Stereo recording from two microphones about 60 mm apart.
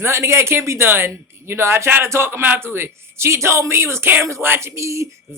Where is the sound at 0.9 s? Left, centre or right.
Right.